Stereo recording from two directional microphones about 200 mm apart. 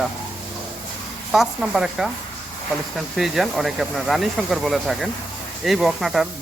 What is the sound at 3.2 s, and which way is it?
Speech, centre (ahead or behind).